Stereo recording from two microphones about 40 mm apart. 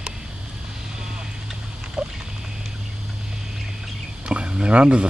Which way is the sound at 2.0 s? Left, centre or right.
Centre.